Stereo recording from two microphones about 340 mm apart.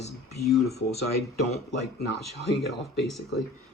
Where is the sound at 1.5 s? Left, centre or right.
Left.